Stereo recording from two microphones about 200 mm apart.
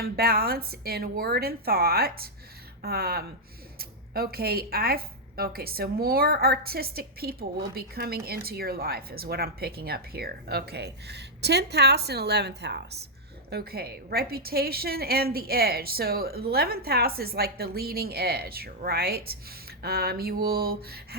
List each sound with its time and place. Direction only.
0.0 s a woman's voice: 50° right (ahead or behind)